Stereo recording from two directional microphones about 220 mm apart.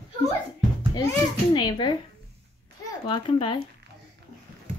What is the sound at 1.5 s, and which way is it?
Speech, 20° left (ahead or behind).